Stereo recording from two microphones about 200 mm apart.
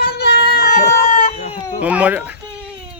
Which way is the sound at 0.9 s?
45° left (ahead or behind).